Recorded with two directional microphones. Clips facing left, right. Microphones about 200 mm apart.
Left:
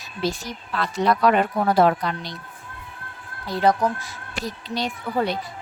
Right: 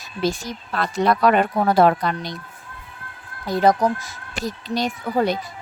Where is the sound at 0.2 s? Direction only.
45° right (ahead or behind).